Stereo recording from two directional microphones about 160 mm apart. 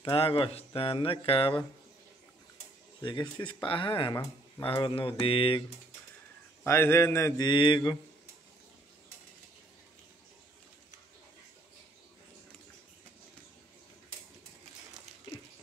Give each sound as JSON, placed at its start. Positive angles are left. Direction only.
{"t": 0.0, "sound": "speech", "side_deg": 35}
{"t": 3.0, "sound": "speech", "side_deg": 30}
{"t": 6.6, "sound": "speech", "side_deg": 15}